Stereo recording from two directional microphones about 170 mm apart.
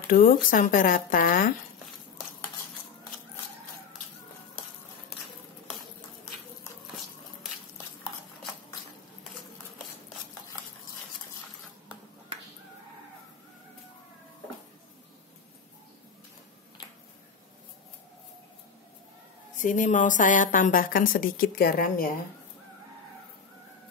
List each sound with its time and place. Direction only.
0.1 s speech: 55° left (ahead or behind)
19.6 s a woman's voice: 50° left (ahead or behind)